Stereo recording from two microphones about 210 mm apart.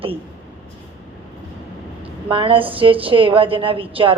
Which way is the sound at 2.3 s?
25° right (ahead or behind).